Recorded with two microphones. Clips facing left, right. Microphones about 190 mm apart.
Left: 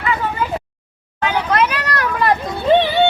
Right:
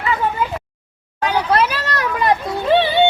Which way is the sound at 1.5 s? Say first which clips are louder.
Even; 30° right (ahead or behind).